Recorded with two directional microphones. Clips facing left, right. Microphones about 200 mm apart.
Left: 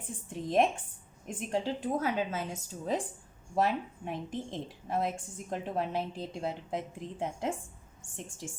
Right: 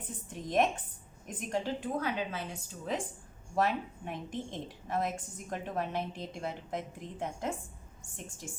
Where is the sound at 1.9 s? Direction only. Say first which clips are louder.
Left 3 dB; 45° left (ahead or behind).